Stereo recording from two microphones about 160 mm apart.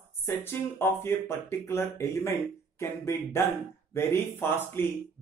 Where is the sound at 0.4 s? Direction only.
15° left (ahead or behind).